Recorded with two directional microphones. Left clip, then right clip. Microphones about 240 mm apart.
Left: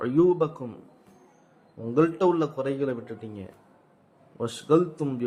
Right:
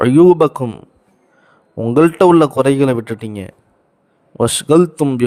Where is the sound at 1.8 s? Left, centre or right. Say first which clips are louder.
Right 12 dB; right.